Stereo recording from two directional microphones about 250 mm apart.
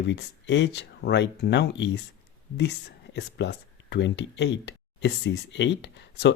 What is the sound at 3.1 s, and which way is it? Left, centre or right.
Speech, left.